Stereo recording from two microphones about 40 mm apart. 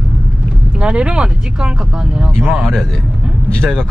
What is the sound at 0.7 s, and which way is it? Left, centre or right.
Speech, right.